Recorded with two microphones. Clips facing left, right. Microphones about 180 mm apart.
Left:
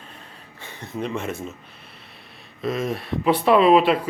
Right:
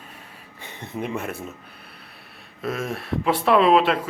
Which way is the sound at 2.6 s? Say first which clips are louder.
Left 3 dB; centre (ahead or behind).